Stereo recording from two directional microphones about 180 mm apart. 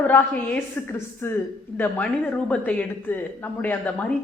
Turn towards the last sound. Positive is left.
turn(degrees=10)  # may be behind; listen again after turning